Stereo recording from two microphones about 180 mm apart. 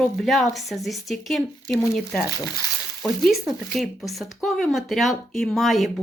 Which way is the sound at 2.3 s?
20° left (ahead or behind).